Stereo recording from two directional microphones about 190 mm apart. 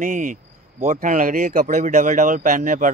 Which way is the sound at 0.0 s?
40° right (ahead or behind).